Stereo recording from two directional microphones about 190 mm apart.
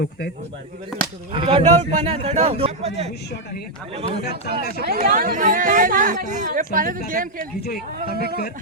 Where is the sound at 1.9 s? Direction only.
40° right (ahead or behind).